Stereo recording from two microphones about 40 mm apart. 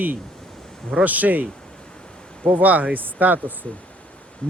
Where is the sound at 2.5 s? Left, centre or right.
Right.